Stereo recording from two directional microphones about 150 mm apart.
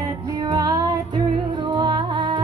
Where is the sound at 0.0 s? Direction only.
25° right (ahead or behind).